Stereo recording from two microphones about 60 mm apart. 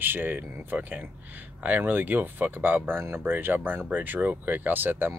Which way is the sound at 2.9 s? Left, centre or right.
Right.